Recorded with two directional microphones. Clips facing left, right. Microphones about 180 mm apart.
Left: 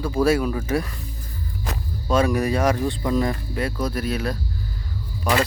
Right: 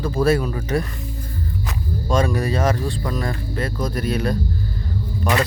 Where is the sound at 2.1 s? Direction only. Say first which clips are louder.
Left 1 dB; 10° left (ahead or behind).